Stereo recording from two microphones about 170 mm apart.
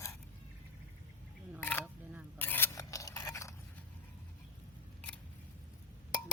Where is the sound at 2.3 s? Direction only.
10° left (ahead or behind).